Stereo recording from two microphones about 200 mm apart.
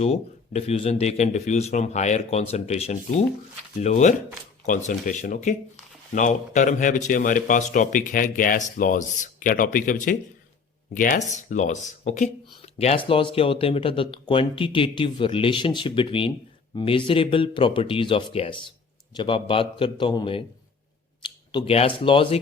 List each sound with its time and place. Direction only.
0.0 s speech: 30° left (ahead or behind)